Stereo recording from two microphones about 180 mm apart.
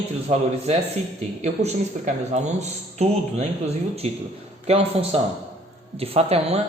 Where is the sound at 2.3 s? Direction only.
40° right (ahead or behind).